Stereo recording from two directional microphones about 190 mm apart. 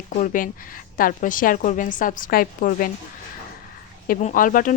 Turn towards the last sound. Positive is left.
turn(degrees=45)  # may be behind; listen again after turning